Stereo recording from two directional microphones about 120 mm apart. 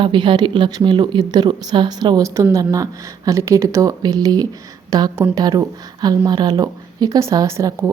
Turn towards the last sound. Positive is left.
turn(degrees=-25)  # may be behind; listen again after turning